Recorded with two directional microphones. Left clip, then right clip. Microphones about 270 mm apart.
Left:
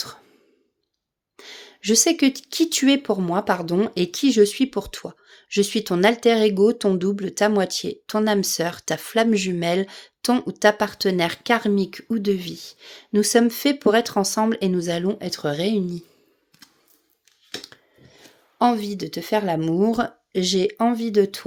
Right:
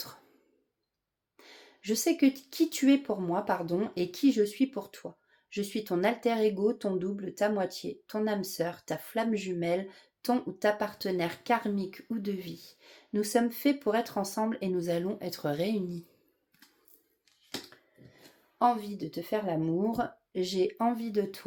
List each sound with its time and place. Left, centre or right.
1.4 s speech: left
18.6 s speech: left